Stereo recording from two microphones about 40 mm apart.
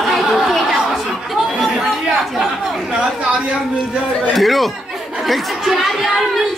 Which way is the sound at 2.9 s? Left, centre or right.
Right.